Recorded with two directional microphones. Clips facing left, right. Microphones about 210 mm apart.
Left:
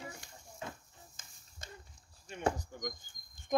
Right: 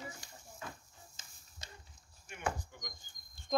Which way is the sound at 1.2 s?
50° left (ahead or behind).